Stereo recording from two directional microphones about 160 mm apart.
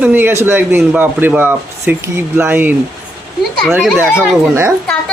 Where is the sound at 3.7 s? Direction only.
5° right (ahead or behind).